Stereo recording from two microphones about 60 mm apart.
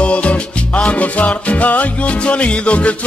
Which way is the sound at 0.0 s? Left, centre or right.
Left.